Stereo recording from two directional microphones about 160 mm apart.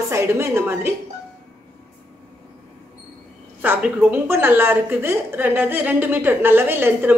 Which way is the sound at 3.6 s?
10° right (ahead or behind).